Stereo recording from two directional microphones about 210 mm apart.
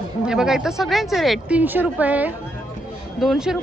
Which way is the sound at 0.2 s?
5° right (ahead or behind).